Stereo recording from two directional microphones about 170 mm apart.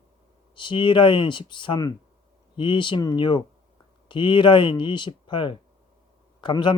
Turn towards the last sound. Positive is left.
turn(degrees=30)  # may be behind; listen again after turning